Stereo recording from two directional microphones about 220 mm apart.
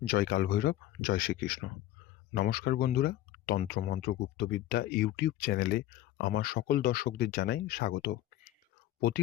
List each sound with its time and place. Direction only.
0.0 s speech: 45° left (ahead or behind)